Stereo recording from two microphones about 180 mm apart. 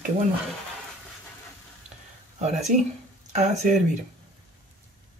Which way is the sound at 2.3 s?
40° right (ahead or behind).